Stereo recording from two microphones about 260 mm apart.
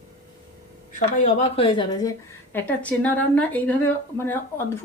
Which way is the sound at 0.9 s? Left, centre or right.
Left.